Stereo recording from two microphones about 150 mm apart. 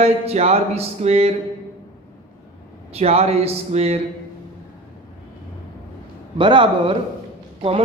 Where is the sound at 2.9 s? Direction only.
45° right (ahead or behind).